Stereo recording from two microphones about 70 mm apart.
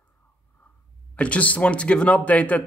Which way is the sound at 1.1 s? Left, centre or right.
Centre.